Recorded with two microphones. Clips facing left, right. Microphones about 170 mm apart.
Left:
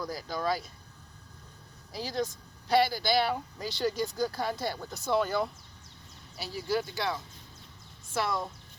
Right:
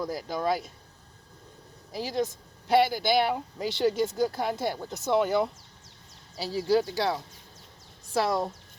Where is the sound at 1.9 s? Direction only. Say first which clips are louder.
Right 3 dB; 20° right (ahead or behind).